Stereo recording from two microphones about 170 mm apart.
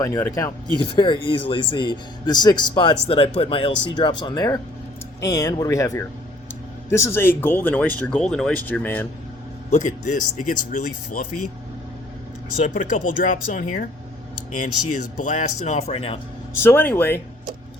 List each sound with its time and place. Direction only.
0.0 s speech: 20° left (ahead or behind)
9.6 s speech: 45° left (ahead or behind)
12.5 s speech: 45° left (ahead or behind)
16.6 s speech: 15° left (ahead or behind)